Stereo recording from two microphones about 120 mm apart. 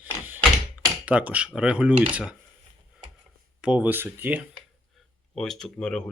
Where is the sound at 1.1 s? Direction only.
10° right (ahead or behind).